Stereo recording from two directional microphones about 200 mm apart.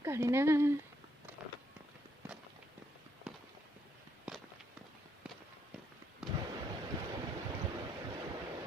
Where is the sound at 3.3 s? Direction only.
5° right (ahead or behind).